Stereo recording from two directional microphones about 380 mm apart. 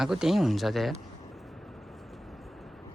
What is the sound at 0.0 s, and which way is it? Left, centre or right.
Speech, centre.